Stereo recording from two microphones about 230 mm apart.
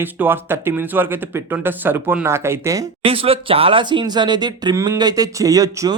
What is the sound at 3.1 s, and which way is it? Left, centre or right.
Speech, right.